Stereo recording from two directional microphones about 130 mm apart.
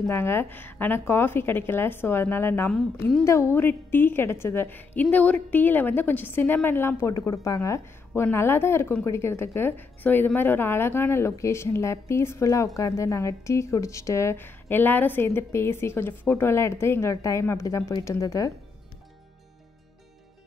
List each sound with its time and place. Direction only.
0.1 s a woman's voice: 20° left (ahead or behind)